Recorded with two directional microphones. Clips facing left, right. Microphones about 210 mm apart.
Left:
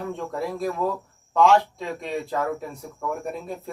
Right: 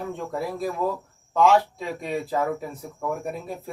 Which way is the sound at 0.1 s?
Centre (ahead or behind).